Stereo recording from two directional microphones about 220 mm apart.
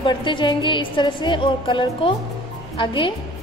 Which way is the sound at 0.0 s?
20° left (ahead or behind).